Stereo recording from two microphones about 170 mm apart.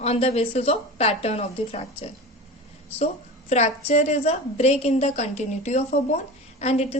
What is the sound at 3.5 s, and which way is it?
A woman's voice, 40° left (ahead or behind).